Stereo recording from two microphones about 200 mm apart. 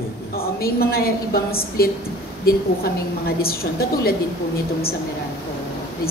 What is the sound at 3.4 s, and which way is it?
Speech, 50° left (ahead or behind).